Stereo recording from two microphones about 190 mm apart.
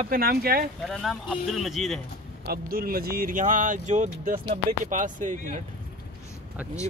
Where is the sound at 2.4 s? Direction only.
55° right (ahead or behind).